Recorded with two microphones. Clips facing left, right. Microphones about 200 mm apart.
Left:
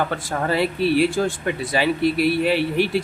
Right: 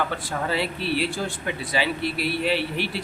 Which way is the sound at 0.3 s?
50° left (ahead or behind).